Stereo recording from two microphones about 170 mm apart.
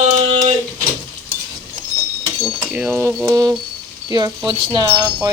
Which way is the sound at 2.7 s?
10° right (ahead or behind).